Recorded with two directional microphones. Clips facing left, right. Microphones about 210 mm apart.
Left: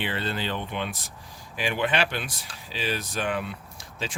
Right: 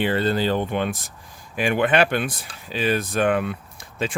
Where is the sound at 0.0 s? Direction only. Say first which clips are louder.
Right 9 dB; 40° right (ahead or behind).